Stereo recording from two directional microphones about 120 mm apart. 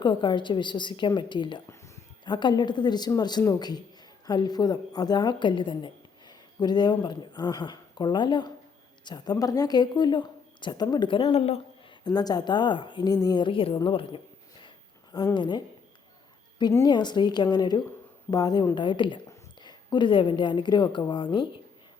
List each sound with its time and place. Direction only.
0.0 s a woman's voice: 40° left (ahead or behind); by 11.6 s 55° left (ahead or behind)
12.0 s a woman's voice: 35° left (ahead or behind)
15.4 s a woman's voice: 40° left (ahead or behind)
16.9 s a woman's voice: 40° left (ahead or behind)